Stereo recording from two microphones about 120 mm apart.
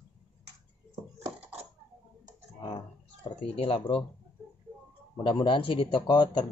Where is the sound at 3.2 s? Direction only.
50° left (ahead or behind).